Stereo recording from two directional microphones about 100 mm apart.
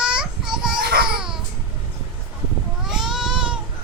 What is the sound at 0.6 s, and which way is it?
Baby cry, 5° right (ahead or behind).